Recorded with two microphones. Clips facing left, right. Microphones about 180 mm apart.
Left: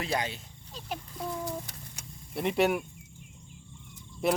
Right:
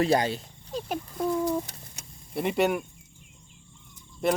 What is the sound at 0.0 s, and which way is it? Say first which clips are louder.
Speech: right 9 dB; 40° right (ahead or behind).